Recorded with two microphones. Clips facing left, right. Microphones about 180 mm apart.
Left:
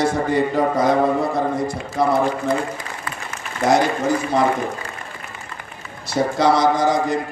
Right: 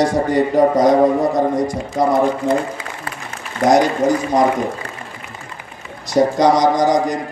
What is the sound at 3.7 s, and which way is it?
Speech, 15° right (ahead or behind).